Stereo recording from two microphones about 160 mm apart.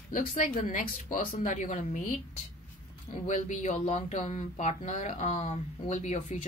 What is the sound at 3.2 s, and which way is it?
Speech, 50° left (ahead or behind).